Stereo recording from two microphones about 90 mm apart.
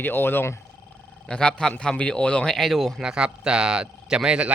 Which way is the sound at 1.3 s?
10° left (ahead or behind).